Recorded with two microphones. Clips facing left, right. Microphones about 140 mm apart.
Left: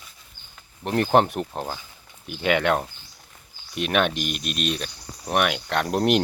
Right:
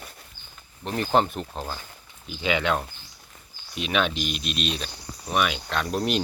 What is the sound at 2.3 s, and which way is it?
Speech, 60° left (ahead or behind).